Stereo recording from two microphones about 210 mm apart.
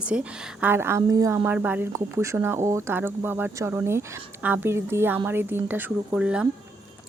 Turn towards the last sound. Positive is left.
turn(degrees=-5)  # may be behind; listen again after turning